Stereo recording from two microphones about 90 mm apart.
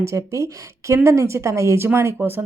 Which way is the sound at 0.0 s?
35° right (ahead or behind).